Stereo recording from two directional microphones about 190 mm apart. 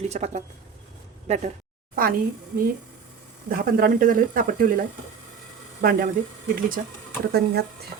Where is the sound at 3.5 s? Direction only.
50° right (ahead or behind).